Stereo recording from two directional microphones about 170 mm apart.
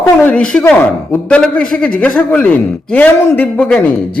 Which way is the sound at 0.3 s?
5° left (ahead or behind).